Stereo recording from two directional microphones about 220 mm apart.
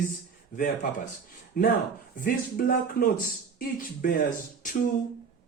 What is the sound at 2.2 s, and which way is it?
Speech, 40° left (ahead or behind).